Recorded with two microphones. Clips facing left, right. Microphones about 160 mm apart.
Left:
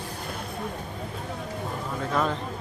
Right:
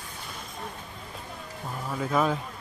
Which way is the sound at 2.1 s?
5° right (ahead or behind).